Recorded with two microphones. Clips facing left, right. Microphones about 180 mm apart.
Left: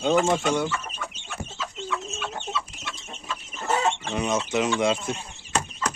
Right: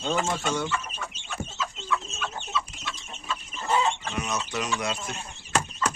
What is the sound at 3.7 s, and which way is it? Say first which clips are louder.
Chicken: left 1 dB; 70° left (ahead or behind).